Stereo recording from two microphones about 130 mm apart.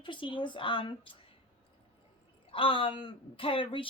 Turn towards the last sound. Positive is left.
turn(degrees=40)  # may be behind; listen again after turning